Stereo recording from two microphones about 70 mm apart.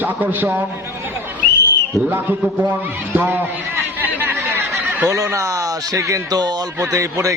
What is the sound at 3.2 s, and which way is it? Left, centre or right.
Speech, right.